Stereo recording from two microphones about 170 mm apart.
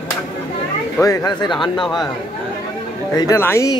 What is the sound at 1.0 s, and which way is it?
Speech, 20° left (ahead or behind).